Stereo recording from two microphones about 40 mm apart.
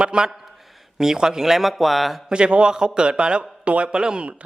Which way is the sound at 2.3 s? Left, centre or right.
Right.